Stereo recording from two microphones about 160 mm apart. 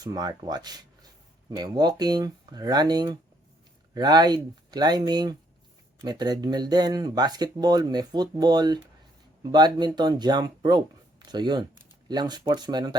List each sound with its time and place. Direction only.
0.0 s speech: 25° right (ahead or behind)